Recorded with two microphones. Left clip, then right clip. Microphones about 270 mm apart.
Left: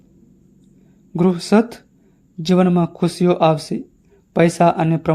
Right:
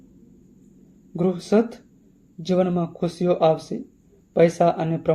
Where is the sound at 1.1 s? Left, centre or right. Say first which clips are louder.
Left 4 dB; left.